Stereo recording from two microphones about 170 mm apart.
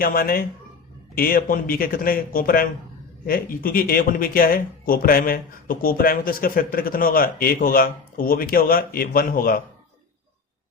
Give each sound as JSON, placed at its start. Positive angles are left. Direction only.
{"t": 0.0, "sound": "speech", "side_deg": 60}